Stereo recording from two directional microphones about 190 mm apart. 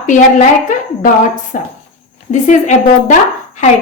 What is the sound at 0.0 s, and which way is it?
Speech, 40° left (ahead or behind).